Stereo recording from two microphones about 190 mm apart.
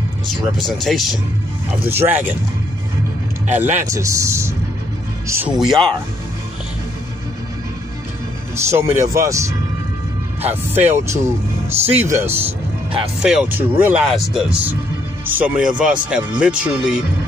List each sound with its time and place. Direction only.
0.3 s speech: centre (ahead or behind)
1.9 s speech: 10° right (ahead or behind)
3.4 s speech: 10° right (ahead or behind)
5.5 s speech: centre (ahead or behind)
8.5 s speech: 15° right (ahead or behind)
10.7 s speech: 10° right (ahead or behind)